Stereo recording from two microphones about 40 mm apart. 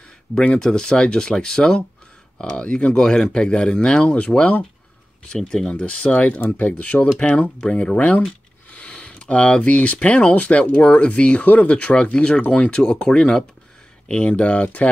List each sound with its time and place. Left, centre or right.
0.6 s speech: centre
4.4 s speech: left
5.3 s speech: centre
6.1 s speech: left
8.6 s a sound: left
10.0 s speech: left
11.7 s speech: left